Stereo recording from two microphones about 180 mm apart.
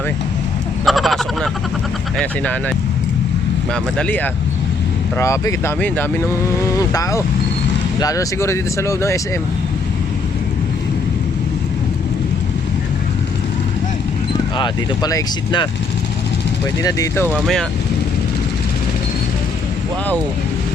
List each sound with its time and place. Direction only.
0.9 s a sound: centre (ahead or behind)
2.1 s speech: 5° left (ahead or behind)
3.9 s speech: 10° left (ahead or behind)
14.6 s speech: 25° left (ahead or behind)
16.8 s speech: 15° left (ahead or behind)
17.4 s speech: centre (ahead or behind)